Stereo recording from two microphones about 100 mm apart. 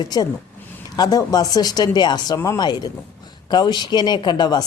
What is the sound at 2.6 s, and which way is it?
Speech, 45° left (ahead or behind).